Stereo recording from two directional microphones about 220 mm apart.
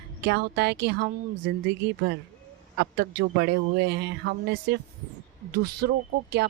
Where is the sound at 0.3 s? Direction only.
50° right (ahead or behind).